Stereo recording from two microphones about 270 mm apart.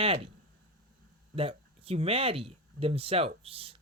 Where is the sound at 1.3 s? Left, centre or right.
Right.